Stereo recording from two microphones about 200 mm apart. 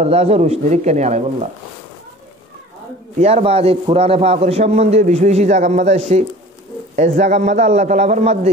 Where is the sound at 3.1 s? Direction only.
30° right (ahead or behind).